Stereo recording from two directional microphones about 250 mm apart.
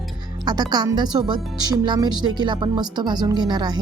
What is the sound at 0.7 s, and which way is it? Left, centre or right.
Speech, centre.